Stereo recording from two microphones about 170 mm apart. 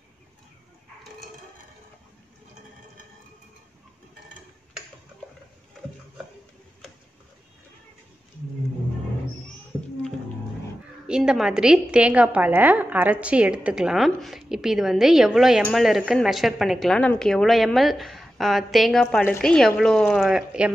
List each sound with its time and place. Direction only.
11.1 s a woman's voice: 5° right (ahead or behind)